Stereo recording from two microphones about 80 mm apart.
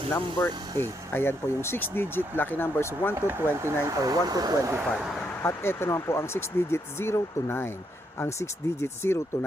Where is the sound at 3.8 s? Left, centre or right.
Right.